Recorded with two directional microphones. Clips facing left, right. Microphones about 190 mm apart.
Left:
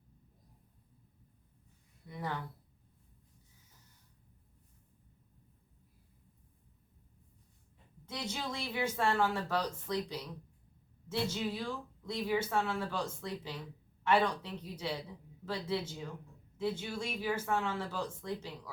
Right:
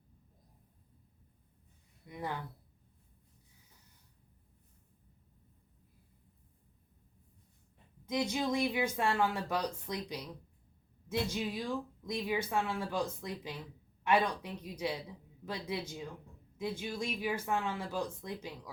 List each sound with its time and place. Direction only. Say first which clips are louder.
2.0 s speech: even; 15° right (ahead or behind)
8.1 s speech: right 7 dB; 15° right (ahead or behind)